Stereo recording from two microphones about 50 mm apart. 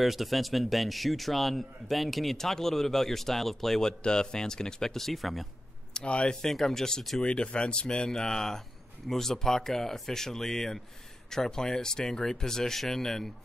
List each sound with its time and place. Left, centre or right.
0.0 s a man's voice: centre
5.9 s speech: left
6.4 s speech: centre